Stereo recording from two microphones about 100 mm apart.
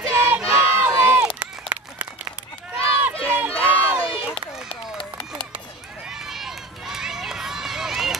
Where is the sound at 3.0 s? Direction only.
15° right (ahead or behind).